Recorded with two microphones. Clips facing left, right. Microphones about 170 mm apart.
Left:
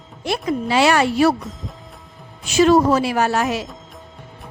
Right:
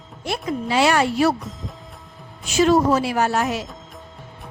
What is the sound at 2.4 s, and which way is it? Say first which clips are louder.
A woman's voice: left 3 dB; 85° left.